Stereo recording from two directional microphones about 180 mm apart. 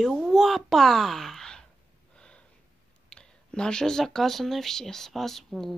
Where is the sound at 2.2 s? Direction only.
5° left (ahead or behind).